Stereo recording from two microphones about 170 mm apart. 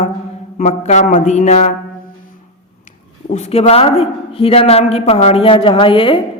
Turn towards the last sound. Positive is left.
turn(degrees=30)  # may be behind; listen again after turning